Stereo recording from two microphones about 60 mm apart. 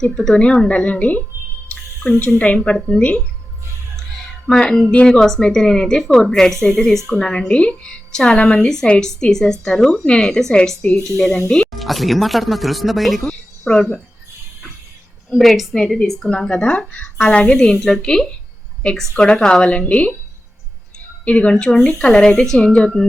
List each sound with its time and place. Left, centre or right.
0.0 s a woman's voice: centre; by 1.2 s left
1.7 s a sound: left
2.4 s a woman's voice: left
4.4 s a woman's voice: centre
15.3 s a woman's voice: centre; by 20.1 s left
21.2 s a woman's voice: centre